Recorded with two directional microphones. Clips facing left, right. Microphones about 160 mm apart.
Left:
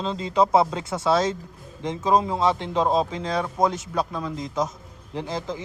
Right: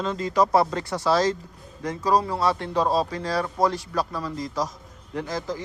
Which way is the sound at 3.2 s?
Centre (ahead or behind).